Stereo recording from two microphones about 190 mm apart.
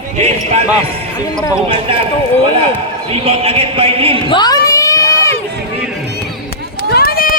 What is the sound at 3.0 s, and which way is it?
Speech, 30° right (ahead or behind).